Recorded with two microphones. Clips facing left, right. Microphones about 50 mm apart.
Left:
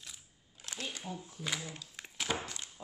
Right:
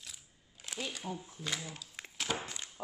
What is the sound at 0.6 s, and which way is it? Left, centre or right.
Camera, centre.